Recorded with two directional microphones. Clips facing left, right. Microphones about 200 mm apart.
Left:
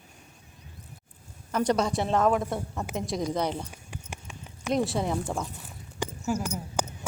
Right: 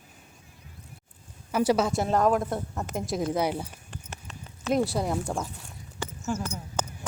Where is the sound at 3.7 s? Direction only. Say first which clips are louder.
Left 1 dB; 10° left (ahead or behind).